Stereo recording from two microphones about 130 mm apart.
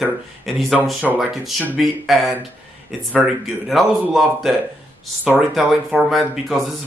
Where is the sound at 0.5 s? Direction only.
Centre (ahead or behind).